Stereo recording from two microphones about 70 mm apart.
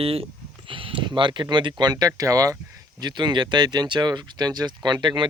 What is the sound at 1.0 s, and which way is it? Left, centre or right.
Speech, right.